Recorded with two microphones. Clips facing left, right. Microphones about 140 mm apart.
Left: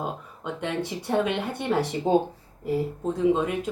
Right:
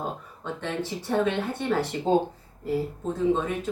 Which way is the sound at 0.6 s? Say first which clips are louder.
Left 2 dB; 15° left (ahead or behind).